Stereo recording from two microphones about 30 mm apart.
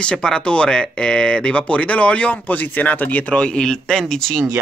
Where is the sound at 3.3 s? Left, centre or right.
Left.